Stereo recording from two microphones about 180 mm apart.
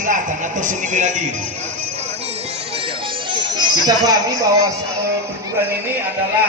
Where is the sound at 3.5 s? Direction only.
25° right (ahead or behind).